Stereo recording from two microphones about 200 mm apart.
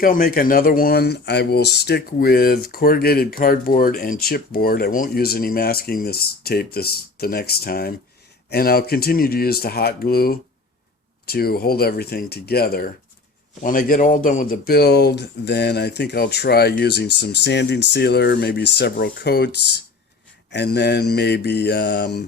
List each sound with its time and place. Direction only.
0.0 s speech: 45° left (ahead or behind)
20.5 s speech: 60° left (ahead or behind)